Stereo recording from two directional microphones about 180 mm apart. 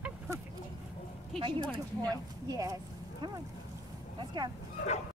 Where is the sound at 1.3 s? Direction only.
30° right (ahead or behind).